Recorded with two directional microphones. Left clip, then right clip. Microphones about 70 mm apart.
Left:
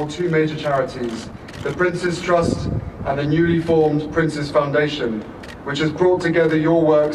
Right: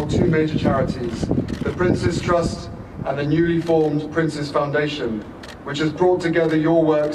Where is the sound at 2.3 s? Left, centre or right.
Left.